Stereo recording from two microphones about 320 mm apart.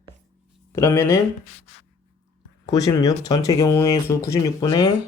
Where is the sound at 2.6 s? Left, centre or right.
Centre.